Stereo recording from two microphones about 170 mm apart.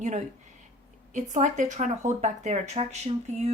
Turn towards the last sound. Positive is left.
turn(degrees=-40)  # may be behind; listen again after turning